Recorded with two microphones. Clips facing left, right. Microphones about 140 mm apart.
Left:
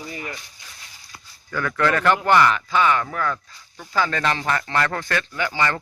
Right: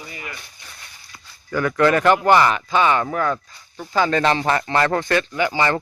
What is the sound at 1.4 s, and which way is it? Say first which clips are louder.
A man's voice: right 5 dB; 15° right (ahead or behind).